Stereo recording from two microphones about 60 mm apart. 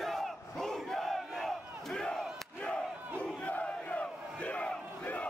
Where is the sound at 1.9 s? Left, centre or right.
Centre.